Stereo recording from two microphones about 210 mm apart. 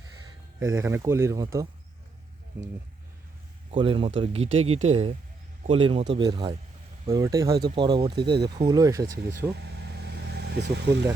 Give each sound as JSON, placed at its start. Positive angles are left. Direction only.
{"t": 0.8, "sound": "speech", "side_deg": -10}
{"t": 3.7, "sound": "speech", "side_deg": -25}
{"t": 9.6, "sound": "vehicle", "side_deg": -50}